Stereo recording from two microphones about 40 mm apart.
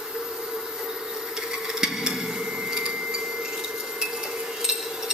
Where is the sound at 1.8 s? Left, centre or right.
Centre.